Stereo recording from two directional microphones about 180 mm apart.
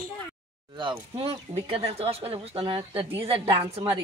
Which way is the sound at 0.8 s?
30° right (ahead or behind).